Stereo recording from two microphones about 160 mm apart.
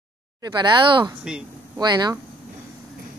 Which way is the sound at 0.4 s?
25° right (ahead or behind).